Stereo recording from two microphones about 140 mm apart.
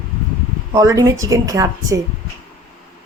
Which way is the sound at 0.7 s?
25° right (ahead or behind).